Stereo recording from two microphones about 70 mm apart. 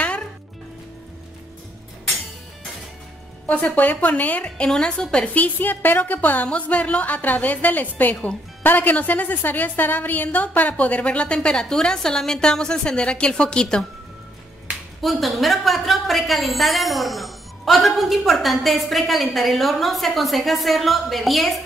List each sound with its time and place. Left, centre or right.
3.4 s a woman's voice: left
15.0 s a woman's voice: centre